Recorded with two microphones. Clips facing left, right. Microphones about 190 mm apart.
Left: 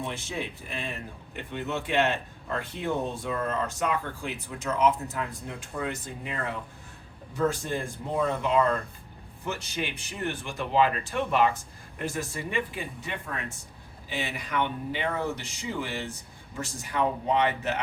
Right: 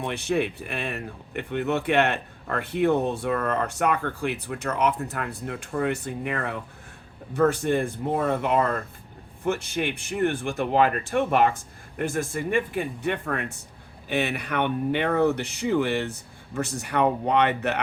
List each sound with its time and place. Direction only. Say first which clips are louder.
0.0 s speech: right 8 dB; 65° right (ahead or behind)